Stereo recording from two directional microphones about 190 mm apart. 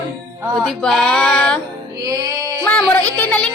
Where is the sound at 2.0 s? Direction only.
20° right (ahead or behind).